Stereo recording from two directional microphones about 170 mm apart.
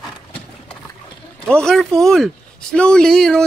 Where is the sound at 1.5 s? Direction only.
5° left (ahead or behind).